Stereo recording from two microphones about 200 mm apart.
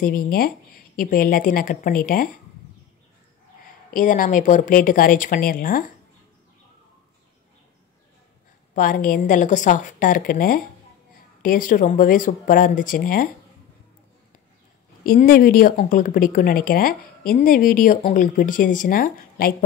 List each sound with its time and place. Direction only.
0.0 s a woman's voice: 45° left (ahead or behind)
3.9 s a woman's voice: 40° left (ahead or behind)
8.7 s a woman's voice: 45° left (ahead or behind)
15.0 s a woman's voice: 45° left (ahead or behind)